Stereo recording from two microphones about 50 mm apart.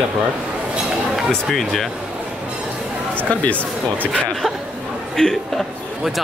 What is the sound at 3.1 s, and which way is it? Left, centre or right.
Speech, left.